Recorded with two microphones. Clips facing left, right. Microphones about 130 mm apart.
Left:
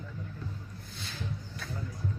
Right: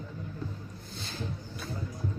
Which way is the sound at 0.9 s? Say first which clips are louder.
Right 3 dB; 35° right (ahead or behind).